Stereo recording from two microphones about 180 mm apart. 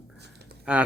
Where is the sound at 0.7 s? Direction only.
5° right (ahead or behind).